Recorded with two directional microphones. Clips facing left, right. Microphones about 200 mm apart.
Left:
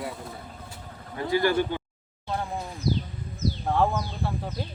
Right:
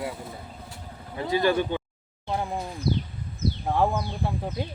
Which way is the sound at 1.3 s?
20° right (ahead or behind).